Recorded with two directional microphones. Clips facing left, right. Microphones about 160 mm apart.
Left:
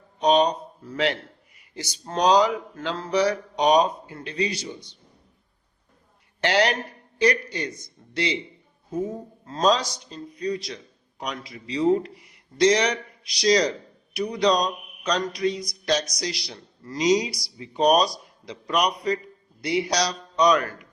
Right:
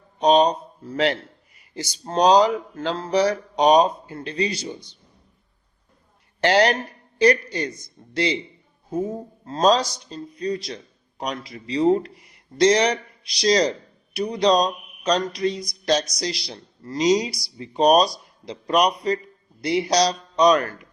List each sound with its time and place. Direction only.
0.2 s speech: 35° right (ahead or behind)
6.4 s speech: 40° right (ahead or behind)
9.5 s speech: 35° right (ahead or behind)